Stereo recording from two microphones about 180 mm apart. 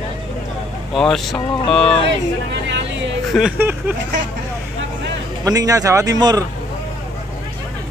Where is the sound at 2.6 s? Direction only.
90° right.